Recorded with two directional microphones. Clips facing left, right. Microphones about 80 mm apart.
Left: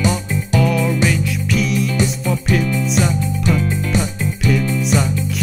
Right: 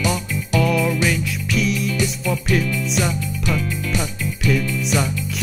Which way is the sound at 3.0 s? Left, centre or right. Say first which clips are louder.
Left 4 dB; left.